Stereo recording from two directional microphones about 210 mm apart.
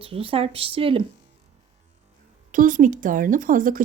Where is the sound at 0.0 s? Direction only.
25° right (ahead or behind).